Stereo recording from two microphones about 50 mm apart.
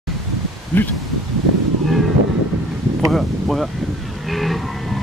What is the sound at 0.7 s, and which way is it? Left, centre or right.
Speech, left.